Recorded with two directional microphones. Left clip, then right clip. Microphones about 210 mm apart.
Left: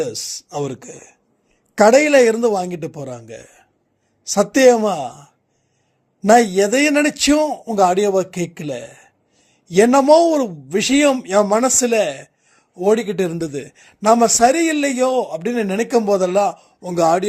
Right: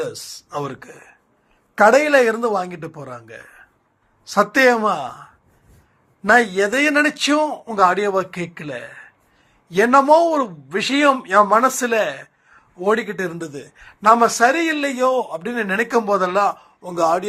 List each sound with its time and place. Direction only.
0.0 s a man's voice: 55° left (ahead or behind)
6.5 s a man's voice: 60° left (ahead or behind)